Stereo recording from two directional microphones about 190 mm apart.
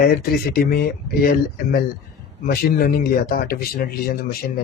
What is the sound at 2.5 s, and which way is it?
Speech, 50° left (ahead or behind).